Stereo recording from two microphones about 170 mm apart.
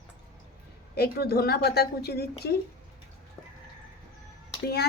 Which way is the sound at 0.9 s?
70° left (ahead or behind).